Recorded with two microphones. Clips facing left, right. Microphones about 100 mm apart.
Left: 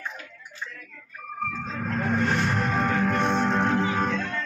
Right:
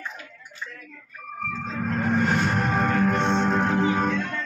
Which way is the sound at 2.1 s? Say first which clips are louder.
Right 2 dB; 20° right (ahead or behind).